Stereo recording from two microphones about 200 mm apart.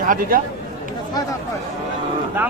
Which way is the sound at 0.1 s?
45° right (ahead or behind).